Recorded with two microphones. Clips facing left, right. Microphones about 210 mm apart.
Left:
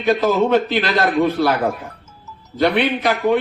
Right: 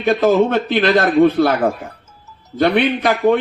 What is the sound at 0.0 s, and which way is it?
A man's voice, 50° right (ahead or behind).